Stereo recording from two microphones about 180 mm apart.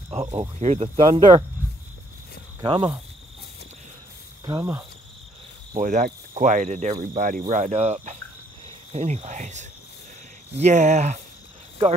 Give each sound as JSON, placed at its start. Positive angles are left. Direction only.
{"t": 0.1, "sound": "speech", "side_deg": -30}
{"t": 2.6, "sound": "speech", "side_deg": -25}
{"t": 4.5, "sound": "speech", "side_deg": -15}
{"t": 5.8, "sound": "speech", "side_deg": -45}
{"t": 8.9, "sound": "cricket", "side_deg": -40}